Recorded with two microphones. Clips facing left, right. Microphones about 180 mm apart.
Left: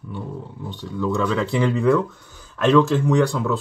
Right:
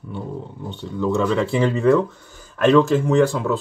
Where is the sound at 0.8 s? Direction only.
30° right (ahead or behind).